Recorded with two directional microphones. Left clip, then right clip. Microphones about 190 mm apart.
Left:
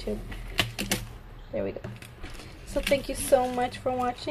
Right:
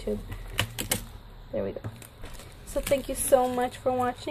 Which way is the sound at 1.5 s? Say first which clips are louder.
Even; 10° right (ahead or behind).